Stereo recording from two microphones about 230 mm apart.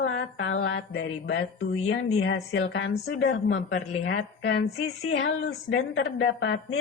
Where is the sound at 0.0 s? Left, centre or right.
Left.